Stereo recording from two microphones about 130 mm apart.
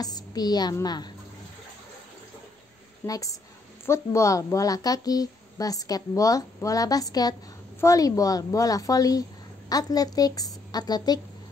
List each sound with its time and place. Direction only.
0.0 s a woman's voice: 30° left (ahead or behind)
3.1 s a woman's voice: 25° left (ahead or behind)